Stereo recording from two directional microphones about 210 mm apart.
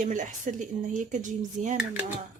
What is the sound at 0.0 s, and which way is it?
Speech, 35° right (ahead or behind).